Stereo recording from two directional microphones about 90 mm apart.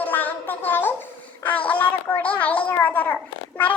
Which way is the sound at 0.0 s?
20° left (ahead or behind).